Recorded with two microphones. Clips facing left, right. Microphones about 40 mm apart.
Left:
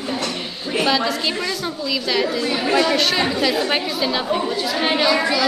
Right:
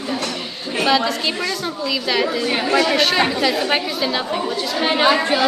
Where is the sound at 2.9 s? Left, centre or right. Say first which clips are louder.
Right 2 dB; centre.